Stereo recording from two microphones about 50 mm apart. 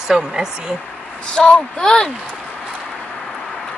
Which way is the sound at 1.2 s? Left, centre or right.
Left.